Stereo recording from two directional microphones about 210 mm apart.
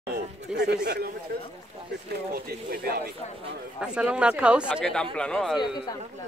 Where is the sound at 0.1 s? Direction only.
50° right (ahead or behind).